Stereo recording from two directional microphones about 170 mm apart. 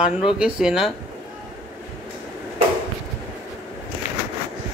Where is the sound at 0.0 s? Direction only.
5° right (ahead or behind).